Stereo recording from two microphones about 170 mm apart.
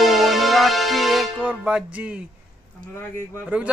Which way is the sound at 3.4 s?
10° right (ahead or behind).